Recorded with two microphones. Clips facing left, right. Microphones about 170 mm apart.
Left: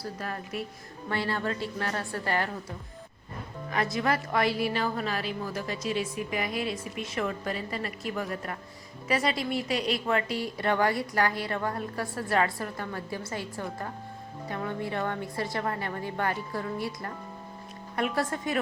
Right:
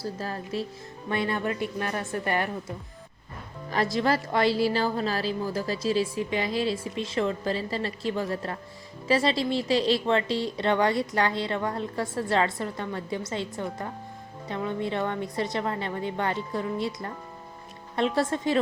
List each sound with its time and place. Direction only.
0.0 s a woman's voice: 30° right (ahead or behind)
3.9 s a woman's voice: 30° right (ahead or behind)